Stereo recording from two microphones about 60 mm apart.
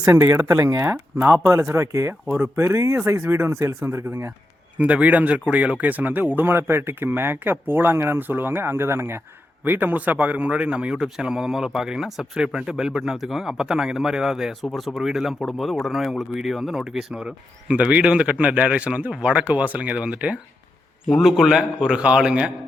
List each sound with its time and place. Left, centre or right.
1.2 s speech: right
1.7 s speech: right
2.4 s speech: right
4.8 s speech: right
9.6 s a man's voice: right; by 17.3 s centre
17.7 s a man's voice: right
21.2 s a man's voice: centre